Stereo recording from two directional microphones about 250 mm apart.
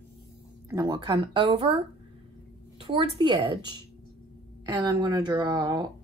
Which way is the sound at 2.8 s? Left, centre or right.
Right.